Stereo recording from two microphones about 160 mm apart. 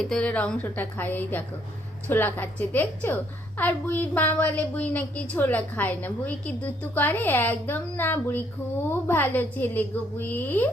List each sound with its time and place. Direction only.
0.0 s a woman's voice: 5° left (ahead or behind)